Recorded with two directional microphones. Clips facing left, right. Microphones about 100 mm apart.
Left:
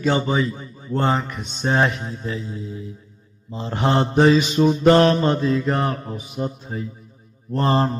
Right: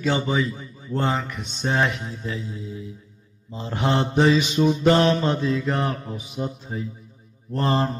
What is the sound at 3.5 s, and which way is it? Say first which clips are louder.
Mantra: left 3 dB; 35° left (ahead or behind).